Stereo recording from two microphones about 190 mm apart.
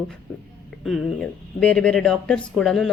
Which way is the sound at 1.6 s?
5° left (ahead or behind).